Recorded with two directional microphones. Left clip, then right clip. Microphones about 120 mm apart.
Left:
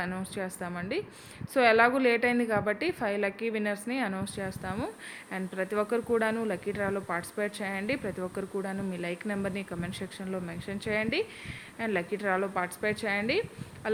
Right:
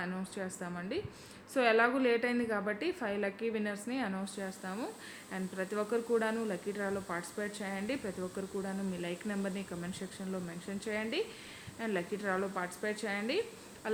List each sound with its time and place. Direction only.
0.0 s speech: 40° left (ahead or behind)
13.8 s insect: 35° left (ahead or behind)